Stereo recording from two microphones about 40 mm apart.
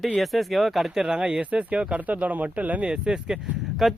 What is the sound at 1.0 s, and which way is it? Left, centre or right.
Speech, centre.